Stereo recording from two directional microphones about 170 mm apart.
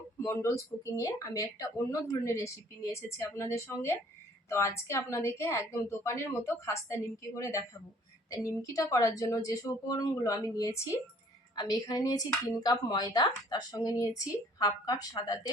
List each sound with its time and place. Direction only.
0.2 s speech: 15° left (ahead or behind)